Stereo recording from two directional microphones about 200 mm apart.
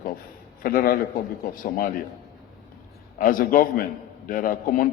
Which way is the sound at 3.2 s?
45° left (ahead or behind).